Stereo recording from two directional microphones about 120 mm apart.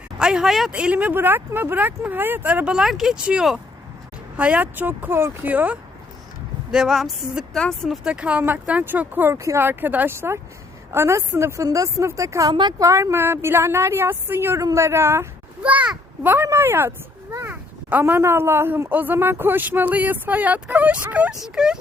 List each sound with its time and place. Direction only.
0.2 s a woman's voice: 5° right (ahead or behind)